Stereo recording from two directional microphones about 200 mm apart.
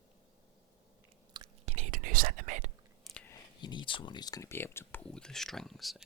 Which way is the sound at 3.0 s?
5° left (ahead or behind).